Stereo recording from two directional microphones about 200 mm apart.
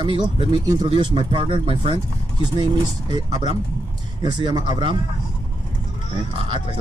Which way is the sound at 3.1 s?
20° right (ahead or behind).